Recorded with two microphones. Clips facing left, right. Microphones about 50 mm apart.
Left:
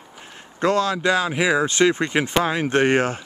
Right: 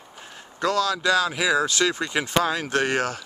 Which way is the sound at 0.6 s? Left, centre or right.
Left.